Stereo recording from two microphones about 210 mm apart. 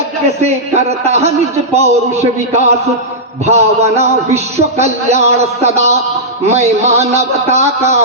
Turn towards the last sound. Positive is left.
turn(degrees=-30)  # may be behind; listen again after turning